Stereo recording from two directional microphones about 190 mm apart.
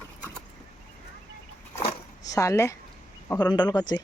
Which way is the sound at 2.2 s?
15° left (ahead or behind).